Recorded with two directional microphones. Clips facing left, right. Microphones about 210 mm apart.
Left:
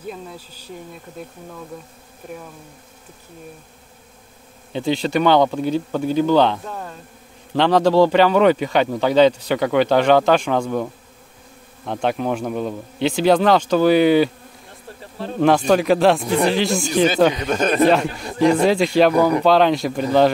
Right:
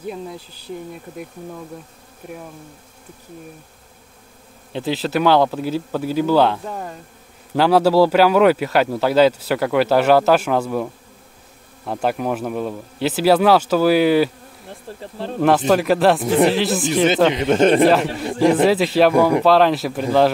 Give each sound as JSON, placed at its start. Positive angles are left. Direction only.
{"t": 4.7, "sound": "speech", "side_deg": 0}
{"t": 15.4, "sound": "speech", "side_deg": -5}
{"t": 17.3, "sound": "speech", "side_deg": -25}
{"t": 18.4, "sound": "speech", "side_deg": -5}